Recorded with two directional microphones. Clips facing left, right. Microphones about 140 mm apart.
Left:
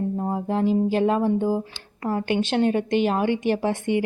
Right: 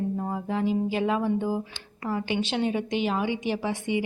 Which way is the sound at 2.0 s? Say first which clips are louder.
Left 4 dB; 45° left (ahead or behind).